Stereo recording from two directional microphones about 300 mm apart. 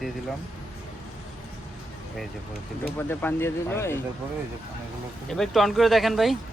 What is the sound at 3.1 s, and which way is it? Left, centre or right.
Speech, centre.